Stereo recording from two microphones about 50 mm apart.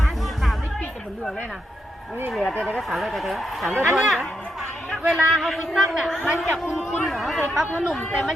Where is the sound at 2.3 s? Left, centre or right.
Centre.